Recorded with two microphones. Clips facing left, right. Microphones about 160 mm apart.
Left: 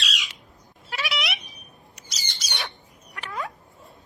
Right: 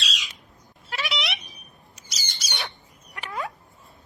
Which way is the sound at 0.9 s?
Centre (ahead or behind).